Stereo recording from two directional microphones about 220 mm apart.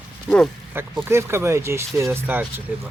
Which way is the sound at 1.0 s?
10° right (ahead or behind).